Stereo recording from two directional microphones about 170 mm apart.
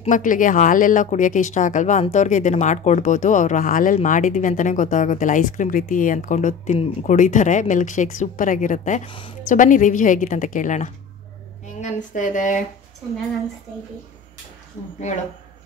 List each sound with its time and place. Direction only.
0.0 s speech: 50° left (ahead or behind)
9.0 s a woman's voice: 30° left (ahead or behind)
9.5 s a woman's voice: 50° left (ahead or behind)